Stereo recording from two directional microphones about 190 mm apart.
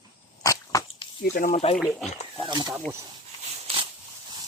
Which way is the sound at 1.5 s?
35° left (ahead or behind).